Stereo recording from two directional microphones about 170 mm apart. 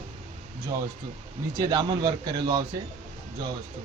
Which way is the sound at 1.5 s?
25° right (ahead or behind).